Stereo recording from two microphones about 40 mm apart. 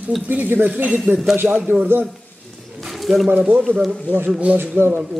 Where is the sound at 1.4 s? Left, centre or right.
Right.